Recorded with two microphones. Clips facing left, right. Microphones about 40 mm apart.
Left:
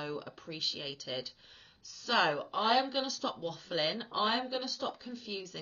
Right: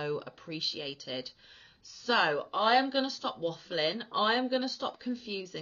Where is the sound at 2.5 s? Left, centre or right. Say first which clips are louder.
Right 3 dB; right.